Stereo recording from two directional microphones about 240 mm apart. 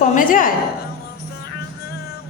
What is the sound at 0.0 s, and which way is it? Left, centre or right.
Speech, left.